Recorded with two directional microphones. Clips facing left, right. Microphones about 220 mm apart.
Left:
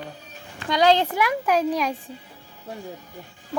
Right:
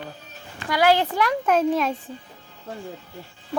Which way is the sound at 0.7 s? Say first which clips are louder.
Left 1 dB; 20° left (ahead or behind).